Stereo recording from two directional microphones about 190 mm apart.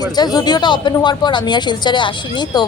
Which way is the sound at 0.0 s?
20° left (ahead or behind).